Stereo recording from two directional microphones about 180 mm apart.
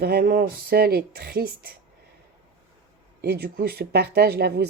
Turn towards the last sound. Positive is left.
turn(degrees=-65)  # may be behind; listen again after turning